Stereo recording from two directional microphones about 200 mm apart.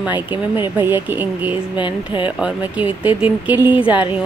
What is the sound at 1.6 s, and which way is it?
Speech, 25° left (ahead or behind).